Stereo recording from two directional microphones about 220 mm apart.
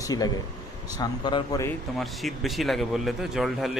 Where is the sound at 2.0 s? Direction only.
Centre (ahead or behind).